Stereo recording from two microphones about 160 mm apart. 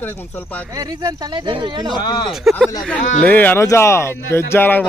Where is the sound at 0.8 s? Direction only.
20° right (ahead or behind).